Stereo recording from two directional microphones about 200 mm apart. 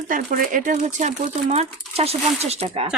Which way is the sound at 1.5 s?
30° right (ahead or behind).